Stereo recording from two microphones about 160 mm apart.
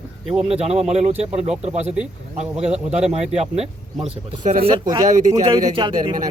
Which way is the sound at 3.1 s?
40° right (ahead or behind).